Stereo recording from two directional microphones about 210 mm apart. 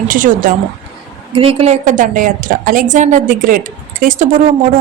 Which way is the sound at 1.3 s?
25° right (ahead or behind).